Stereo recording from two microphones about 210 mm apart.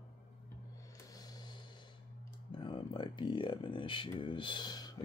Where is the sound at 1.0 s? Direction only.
20° left (ahead or behind).